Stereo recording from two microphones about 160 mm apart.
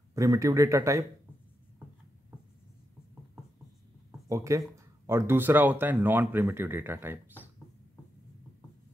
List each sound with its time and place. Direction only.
0.1 s speech: 20° right (ahead or behind)
4.3 s speech: 20° right (ahead or behind)